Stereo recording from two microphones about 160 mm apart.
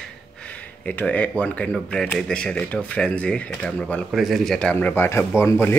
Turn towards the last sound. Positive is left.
turn(degrees=15)  # may be behind; listen again after turning